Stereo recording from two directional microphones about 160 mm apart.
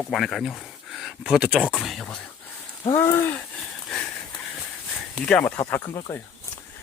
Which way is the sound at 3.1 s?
15° left (ahead or behind).